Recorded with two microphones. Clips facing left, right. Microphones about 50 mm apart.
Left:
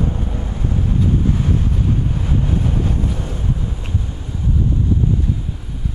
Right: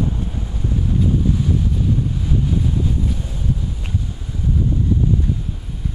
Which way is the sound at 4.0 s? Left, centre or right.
Left.